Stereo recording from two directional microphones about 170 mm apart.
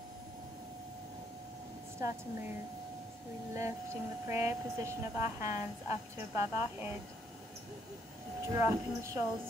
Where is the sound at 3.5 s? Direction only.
15° right (ahead or behind).